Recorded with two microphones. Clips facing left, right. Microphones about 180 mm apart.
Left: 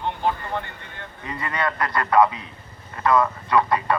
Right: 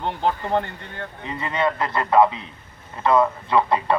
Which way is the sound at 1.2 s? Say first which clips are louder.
Right 3 dB; 25° right (ahead or behind).